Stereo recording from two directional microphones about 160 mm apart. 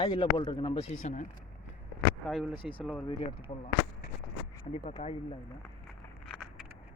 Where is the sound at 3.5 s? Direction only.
40° left (ahead or behind).